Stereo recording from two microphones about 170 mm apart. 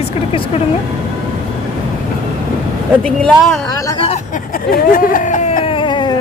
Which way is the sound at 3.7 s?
20° left (ahead or behind).